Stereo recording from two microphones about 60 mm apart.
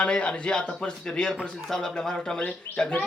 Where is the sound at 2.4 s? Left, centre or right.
Left.